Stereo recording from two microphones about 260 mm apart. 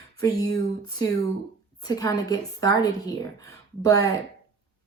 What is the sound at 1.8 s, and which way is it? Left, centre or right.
A woman's voice, centre.